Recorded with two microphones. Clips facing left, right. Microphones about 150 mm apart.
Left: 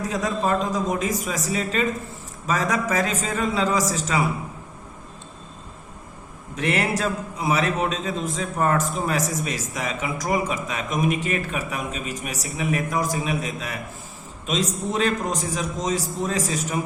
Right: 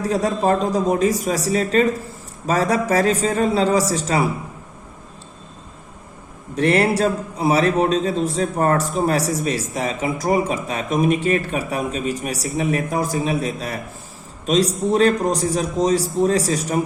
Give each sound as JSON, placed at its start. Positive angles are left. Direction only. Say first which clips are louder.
{"t": 0.1, "sound": "a man's voice", "louder": "right 5 dB", "side_deg": -35}
{"t": 6.6, "sound": "a man's voice", "louder": "right 7 dB", "side_deg": -35}